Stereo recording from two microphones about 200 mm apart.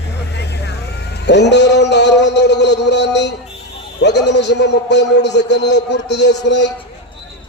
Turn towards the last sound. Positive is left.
turn(degrees=60)  # may be behind; listen again after turning